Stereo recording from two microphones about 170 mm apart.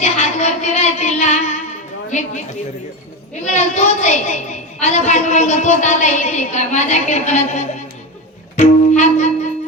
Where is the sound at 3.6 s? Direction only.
45° left (ahead or behind).